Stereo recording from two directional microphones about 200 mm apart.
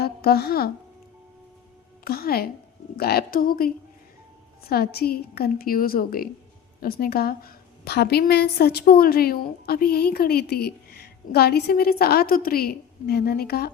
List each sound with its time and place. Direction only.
0.0 s speech: 50° left (ahead or behind)
2.0 s a woman's voice: 50° left (ahead or behind)
4.7 s a woman's voice: 50° left (ahead or behind)